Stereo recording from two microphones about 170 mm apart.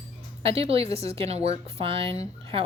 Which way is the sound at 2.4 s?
35° right (ahead or behind).